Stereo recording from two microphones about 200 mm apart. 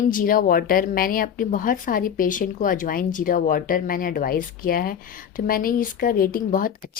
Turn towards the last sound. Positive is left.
turn(degrees=45)  # may be behind; listen again after turning